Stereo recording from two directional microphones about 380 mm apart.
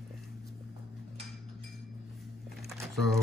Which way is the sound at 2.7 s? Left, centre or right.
Centre.